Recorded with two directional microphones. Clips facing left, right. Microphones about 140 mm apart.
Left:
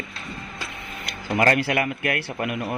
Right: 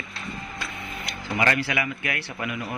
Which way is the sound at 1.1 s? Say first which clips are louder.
Left 4 dB; 50° left (ahead or behind).